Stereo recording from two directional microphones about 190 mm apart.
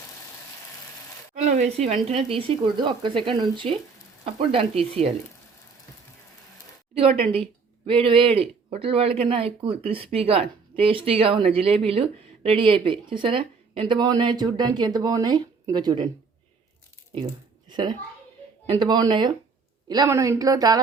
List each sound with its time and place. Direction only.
1.4 s speech: 40° right (ahead or behind)
7.9 s speech: 25° right (ahead or behind)
17.7 s a child's voice: 25° right (ahead or behind)